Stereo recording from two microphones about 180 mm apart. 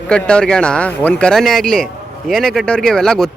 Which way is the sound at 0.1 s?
5° left (ahead or behind).